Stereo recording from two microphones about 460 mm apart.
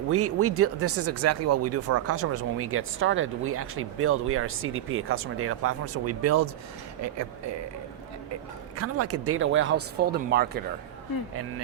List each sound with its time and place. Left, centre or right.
0.1 s speech: right
8.7 s speech: right